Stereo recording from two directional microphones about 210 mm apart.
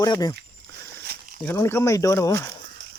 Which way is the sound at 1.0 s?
50° right (ahead or behind).